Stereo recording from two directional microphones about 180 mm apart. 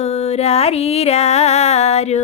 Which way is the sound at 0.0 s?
35° left (ahead or behind).